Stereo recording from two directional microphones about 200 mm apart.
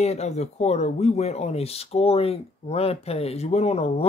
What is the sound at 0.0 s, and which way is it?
Speech, 35° left (ahead or behind).